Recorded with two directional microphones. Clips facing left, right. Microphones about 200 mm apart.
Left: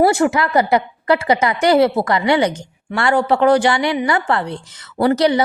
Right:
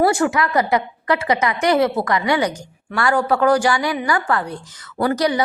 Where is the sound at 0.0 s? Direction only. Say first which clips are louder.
Left 3 dB; 25° left (ahead or behind).